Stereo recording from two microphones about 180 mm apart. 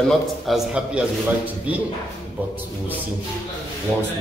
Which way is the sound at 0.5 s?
5° right (ahead or behind).